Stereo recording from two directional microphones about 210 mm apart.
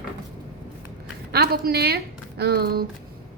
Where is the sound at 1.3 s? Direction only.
50° right (ahead or behind).